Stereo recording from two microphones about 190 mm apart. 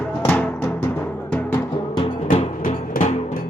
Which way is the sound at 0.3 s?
10° left (ahead or behind).